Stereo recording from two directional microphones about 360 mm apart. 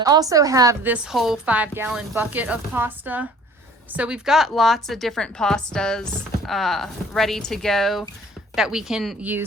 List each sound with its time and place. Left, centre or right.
0.0 s a woman's voice: centre